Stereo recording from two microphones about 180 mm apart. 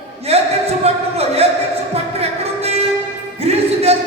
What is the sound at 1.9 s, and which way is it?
Music, 35° right (ahead or behind).